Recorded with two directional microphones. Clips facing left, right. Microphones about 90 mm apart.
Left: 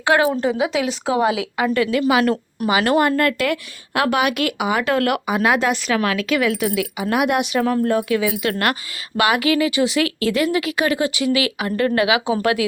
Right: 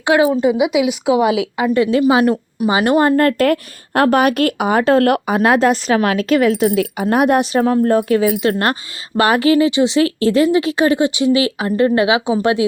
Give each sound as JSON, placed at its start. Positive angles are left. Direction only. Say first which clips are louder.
{"t": 0.0, "sound": "speech", "louder": "right 4 dB", "side_deg": -15}
{"t": 1.4, "sound": "speech", "louder": "right 4 dB", "side_deg": -20}
{"t": 2.2, "sound": "speech", "louder": "right 4 dB", "side_deg": -10}
{"t": 2.6, "sound": "speech", "louder": "right 3 dB", "side_deg": -30}